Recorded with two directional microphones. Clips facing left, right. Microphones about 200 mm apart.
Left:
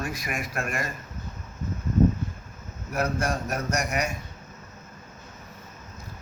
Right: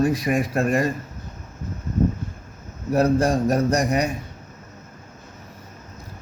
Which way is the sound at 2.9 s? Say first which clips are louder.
Right 9 dB; 35° right (ahead or behind).